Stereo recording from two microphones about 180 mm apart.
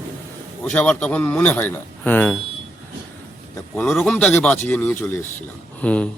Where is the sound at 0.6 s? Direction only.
5° left (ahead or behind).